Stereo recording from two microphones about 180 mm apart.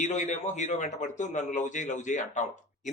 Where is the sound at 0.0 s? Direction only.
40° left (ahead or behind).